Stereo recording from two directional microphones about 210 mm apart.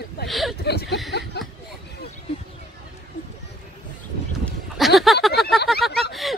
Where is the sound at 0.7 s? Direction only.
50° left (ahead or behind).